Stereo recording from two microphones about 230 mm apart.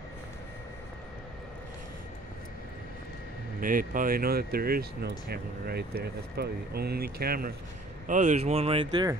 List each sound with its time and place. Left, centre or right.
3.6 s speech: right